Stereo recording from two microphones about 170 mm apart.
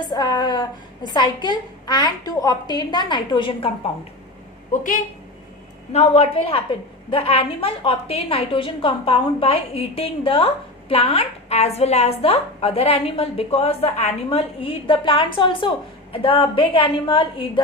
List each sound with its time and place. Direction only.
0.1 s a woman's voice: 25° left (ahead or behind)
5.9 s a woman's voice: 35° left (ahead or behind)